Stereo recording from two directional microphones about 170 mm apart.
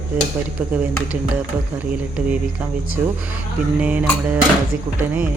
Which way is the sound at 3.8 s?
10° right (ahead or behind).